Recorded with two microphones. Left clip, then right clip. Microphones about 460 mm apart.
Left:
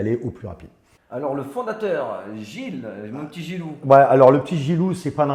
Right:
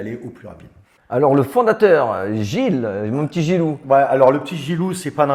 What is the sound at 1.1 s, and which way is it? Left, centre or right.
Speech, right.